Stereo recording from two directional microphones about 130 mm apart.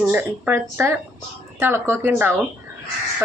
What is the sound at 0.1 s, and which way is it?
Speech, 15° right (ahead or behind).